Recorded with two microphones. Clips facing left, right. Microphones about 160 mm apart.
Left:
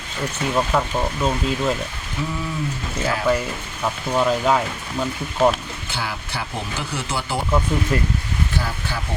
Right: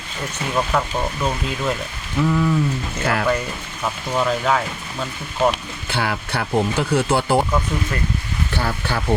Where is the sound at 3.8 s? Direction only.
5° left (ahead or behind).